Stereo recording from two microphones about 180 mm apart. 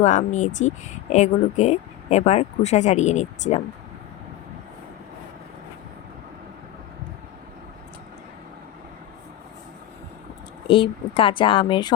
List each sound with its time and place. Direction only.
0.0 s speech: 40° left (ahead or behind)
10.7 s speech: 30° left (ahead or behind)